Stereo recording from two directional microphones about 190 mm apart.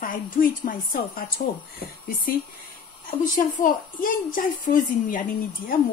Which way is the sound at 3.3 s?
45° left (ahead or behind).